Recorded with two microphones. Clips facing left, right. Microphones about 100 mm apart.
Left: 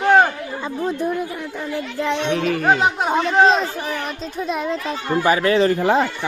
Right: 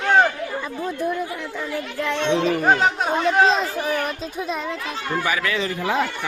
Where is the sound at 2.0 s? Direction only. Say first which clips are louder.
Left 1 dB; 15° left (ahead or behind).